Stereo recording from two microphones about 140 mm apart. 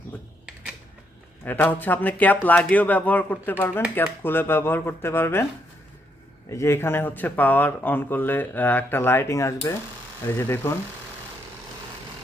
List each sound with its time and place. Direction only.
1.5 s speech: 15° left (ahead or behind)
6.5 s speech: 20° left (ahead or behind)